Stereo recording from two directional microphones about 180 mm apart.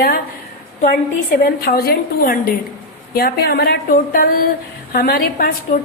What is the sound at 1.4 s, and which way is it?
A woman's voice, 60° left (ahead or behind).